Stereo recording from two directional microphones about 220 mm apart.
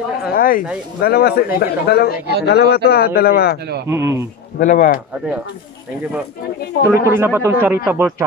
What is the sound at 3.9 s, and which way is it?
Speech, 15° right (ahead or behind).